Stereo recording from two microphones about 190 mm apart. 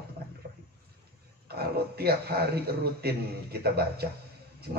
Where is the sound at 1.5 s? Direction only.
55° right (ahead or behind).